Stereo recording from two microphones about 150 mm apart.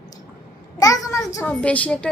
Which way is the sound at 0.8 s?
25° left (ahead or behind).